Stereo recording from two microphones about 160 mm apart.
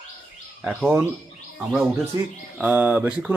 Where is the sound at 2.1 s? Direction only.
20° right (ahead or behind).